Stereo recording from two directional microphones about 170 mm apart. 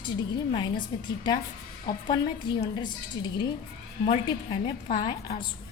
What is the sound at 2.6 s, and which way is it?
A woman's voice, 25° left (ahead or behind).